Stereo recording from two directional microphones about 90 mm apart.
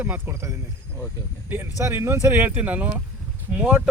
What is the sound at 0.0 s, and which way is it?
Speech, 20° right (ahead or behind).